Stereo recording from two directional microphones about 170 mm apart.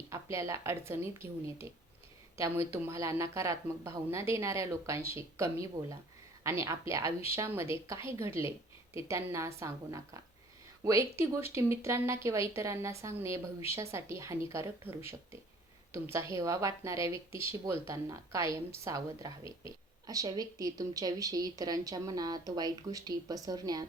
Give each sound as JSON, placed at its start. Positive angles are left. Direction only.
{"t": 0.1, "sound": "speech", "side_deg": -15}
{"t": 2.7, "sound": "speech", "side_deg": -15}
{"t": 16.0, "sound": "speech", "side_deg": -15}